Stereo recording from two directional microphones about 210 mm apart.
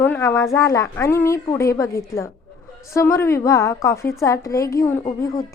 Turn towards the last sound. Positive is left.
turn(degrees=15)  # may be behind; listen again after turning